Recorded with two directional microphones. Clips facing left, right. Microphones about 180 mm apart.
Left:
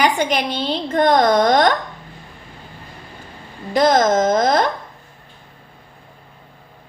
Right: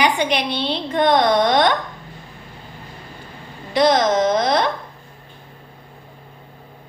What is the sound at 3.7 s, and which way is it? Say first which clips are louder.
Speech: left 1 dB; 45° left (ahead or behind).